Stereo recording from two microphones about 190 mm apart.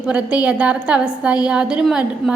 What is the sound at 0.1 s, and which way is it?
A woman's voice, 5° right (ahead or behind).